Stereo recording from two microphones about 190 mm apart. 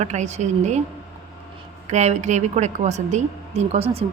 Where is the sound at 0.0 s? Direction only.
35° right (ahead or behind).